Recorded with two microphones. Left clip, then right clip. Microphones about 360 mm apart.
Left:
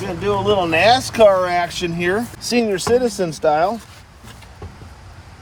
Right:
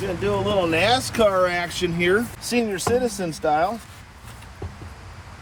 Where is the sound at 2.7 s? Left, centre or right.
Left.